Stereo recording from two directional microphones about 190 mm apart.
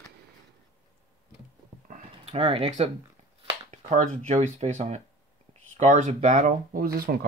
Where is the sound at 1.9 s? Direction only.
35° right (ahead or behind).